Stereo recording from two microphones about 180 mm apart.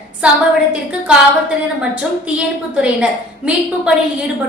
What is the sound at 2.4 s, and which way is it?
Speech, 5° right (ahead or behind).